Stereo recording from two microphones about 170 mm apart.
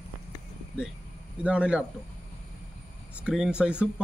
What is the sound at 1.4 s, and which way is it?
Speech, 5° right (ahead or behind).